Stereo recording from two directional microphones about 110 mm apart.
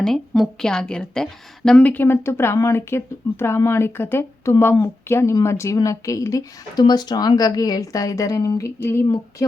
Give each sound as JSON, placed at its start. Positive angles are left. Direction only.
{"t": 0.0, "sound": "a woman's voice", "side_deg": 5}
{"t": 9.0, "sound": "a woman's voice", "side_deg": 35}